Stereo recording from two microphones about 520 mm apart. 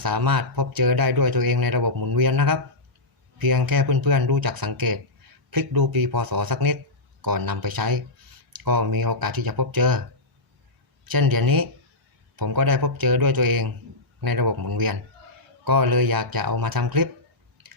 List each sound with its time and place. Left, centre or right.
0.0 s speech: right
11.0 s speech: right